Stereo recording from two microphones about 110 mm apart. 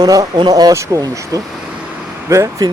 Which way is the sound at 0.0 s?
35° right (ahead or behind).